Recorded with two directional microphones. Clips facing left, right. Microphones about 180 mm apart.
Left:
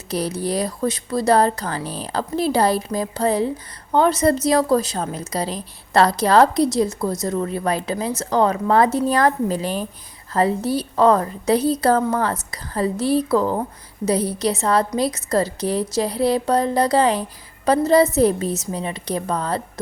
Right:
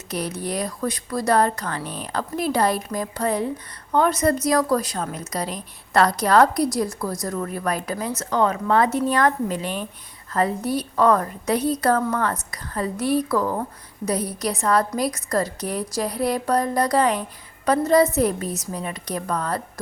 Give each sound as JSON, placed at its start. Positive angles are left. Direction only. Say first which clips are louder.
{"t": 0.1, "sound": "a woman's voice", "louder": "left 4 dB", "side_deg": 30}